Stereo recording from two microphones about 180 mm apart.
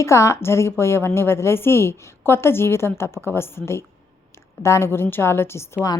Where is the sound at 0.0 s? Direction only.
15° left (ahead or behind).